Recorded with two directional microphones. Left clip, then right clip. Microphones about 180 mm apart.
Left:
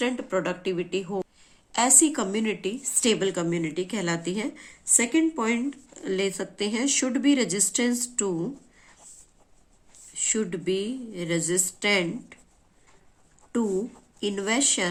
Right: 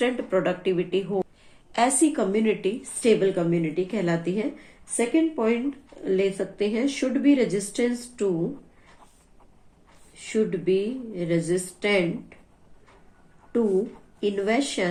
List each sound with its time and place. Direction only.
0.0 s a woman's voice: 25° left (ahead or behind); by 8.3 s 40° left (ahead or behind)
10.2 s a woman's voice: 40° left (ahead or behind)
14.2 s a woman's voice: 35° left (ahead or behind)